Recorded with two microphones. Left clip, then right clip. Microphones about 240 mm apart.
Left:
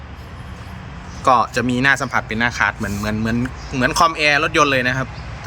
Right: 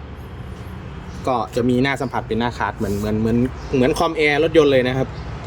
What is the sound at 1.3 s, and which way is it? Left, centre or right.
Speech, centre.